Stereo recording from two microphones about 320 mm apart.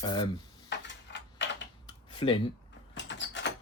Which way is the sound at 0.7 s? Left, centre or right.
Left.